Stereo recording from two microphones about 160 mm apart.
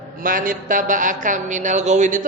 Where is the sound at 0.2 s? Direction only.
60° right (ahead or behind).